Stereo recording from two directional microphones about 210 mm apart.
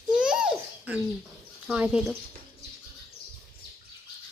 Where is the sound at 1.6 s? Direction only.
5° right (ahead or behind).